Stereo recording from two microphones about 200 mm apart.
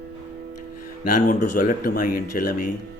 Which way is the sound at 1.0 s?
40° left (ahead or behind).